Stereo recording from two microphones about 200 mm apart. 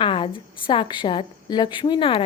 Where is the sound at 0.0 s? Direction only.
25° left (ahead or behind).